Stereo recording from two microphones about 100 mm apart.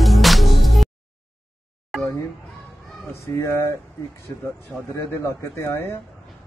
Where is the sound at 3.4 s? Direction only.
25° left (ahead or behind).